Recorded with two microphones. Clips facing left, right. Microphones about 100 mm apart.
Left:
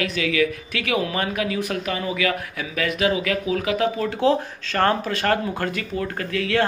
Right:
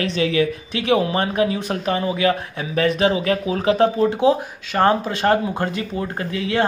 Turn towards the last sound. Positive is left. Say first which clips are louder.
# right 1 dB
turn(degrees=-20)  # may be behind; listen again after turning